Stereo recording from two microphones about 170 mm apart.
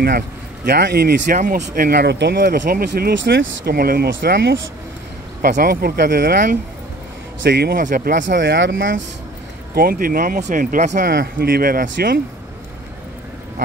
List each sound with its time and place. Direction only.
0.7 s speech: 80° right
5.4 s speech: 60° right (ahead or behind)
7.4 s speech: 75° right (ahead or behind)
7.8 s speech: 55° right (ahead or behind)
8.3 s speech: 90° right
9.8 s speech: 60° right (ahead or behind)